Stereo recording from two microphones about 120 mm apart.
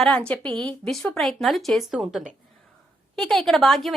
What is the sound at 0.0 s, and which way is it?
A woman's voice, 10° left (ahead or behind).